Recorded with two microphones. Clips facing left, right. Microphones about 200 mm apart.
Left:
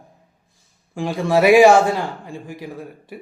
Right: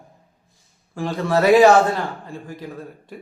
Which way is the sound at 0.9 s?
10° left (ahead or behind).